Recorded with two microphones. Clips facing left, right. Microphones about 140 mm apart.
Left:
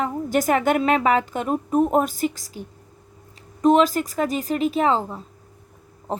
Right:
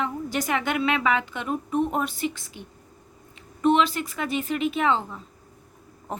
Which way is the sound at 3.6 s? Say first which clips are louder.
Left 4 dB; 40° left (ahead or behind).